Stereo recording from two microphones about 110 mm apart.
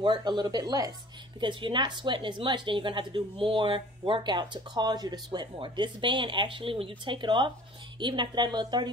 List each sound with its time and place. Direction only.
0.0 s speech: 40° right (ahead or behind)
1.4 s a woman's voice: 45° right (ahead or behind)